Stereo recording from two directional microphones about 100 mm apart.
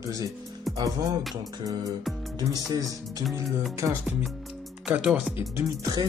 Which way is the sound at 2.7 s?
35° right (ahead or behind).